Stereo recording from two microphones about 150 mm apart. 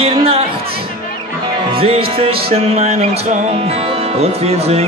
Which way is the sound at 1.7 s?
40° right (ahead or behind).